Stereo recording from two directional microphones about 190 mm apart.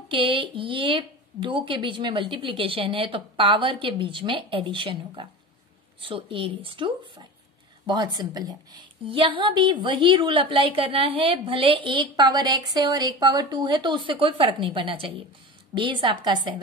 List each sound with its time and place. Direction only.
0.1 s a woman's voice: 25° right (ahead or behind)